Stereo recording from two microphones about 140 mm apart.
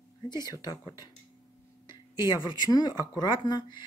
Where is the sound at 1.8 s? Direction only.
30° left (ahead or behind).